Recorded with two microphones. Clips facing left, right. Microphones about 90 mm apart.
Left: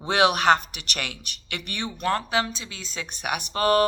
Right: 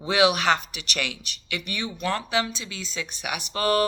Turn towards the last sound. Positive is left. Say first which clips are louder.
# left 2 dB
turn(degrees=40)  # may be behind; listen again after turning